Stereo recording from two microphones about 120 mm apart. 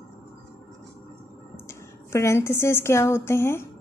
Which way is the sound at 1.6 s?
25° left (ahead or behind).